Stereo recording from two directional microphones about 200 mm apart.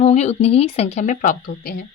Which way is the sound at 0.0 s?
35° left (ahead or behind).